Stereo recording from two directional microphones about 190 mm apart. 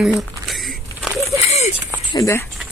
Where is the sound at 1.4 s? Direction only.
35° left (ahead or behind).